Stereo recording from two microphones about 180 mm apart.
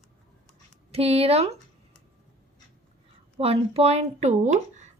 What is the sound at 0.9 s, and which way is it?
Speech, 35° right (ahead or behind).